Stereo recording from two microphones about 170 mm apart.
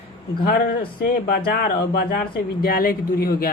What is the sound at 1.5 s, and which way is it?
A man's voice, 60° left (ahead or behind).